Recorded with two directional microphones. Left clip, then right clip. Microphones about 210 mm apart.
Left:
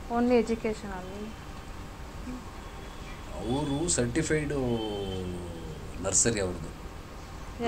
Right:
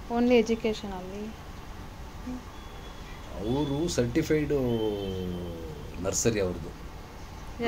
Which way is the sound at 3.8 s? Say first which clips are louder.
Right 1 dB; 45° right (ahead or behind).